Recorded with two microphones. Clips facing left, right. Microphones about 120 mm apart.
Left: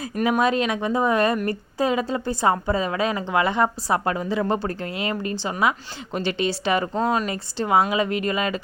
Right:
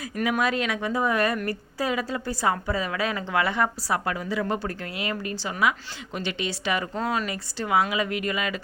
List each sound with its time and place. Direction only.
0.0 s a woman's voice: 30° left (ahead or behind)
7.0 s a woman's voice: 20° left (ahead or behind)
7.3 s a woman's voice: 30° left (ahead or behind)